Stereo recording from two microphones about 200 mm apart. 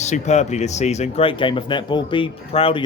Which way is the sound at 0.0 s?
35° left (ahead or behind).